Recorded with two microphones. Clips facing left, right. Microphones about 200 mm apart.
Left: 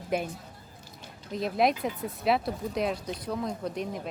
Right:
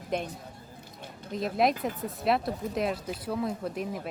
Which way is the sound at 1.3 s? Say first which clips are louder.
Even; centre (ahead or behind).